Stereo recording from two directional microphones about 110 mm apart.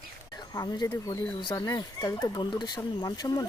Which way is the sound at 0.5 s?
35° left (ahead or behind).